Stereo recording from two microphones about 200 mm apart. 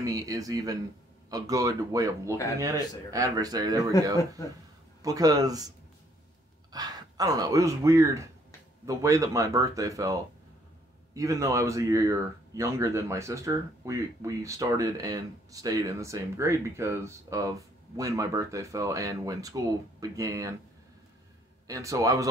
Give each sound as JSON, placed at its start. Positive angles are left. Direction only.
{"t": 0.0, "sound": "speech", "side_deg": -15}
{"t": 5.0, "sound": "speech", "side_deg": -20}
{"t": 6.7, "sound": "speech", "side_deg": -20}
{"t": 21.6, "sound": "speech", "side_deg": -15}